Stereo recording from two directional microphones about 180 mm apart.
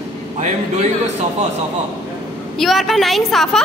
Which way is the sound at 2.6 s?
Centre (ahead or behind).